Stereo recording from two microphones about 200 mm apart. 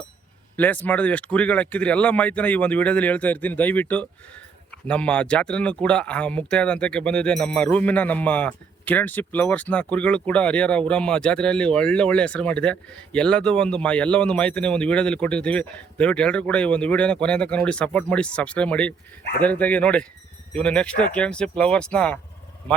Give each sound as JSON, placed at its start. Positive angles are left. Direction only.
{"t": 0.5, "sound": "speech", "side_deg": 10}